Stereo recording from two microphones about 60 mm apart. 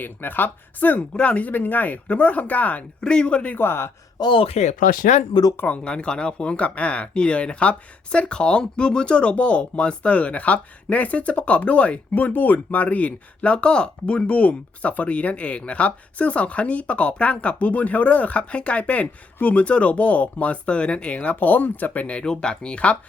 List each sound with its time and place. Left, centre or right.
0.0 s speech: left
3.0 s speech: centre
3.6 s a man's voice: left
5.6 s speech: left